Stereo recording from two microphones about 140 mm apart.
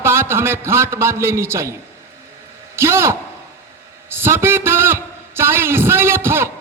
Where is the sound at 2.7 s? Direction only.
20° right (ahead or behind).